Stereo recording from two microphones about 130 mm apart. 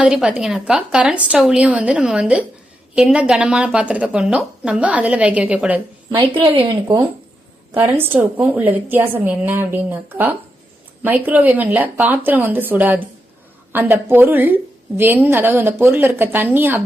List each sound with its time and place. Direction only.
0.0 s a woman's voice: 5° right (ahead or behind)
6.1 s a woman's voice: 45° right (ahead or behind)
7.7 s a woman's voice: 15° right (ahead or behind)